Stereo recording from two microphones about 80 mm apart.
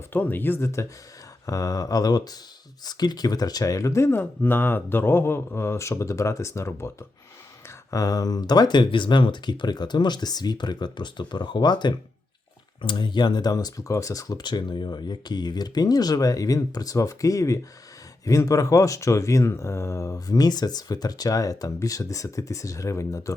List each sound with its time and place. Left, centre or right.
0.1 s speech: left
1.5 s speech: left
4.1 s speech: left
7.9 s speech: left
12.8 s speech: left